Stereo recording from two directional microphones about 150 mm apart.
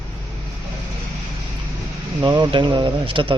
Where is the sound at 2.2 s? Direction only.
25° right (ahead or behind).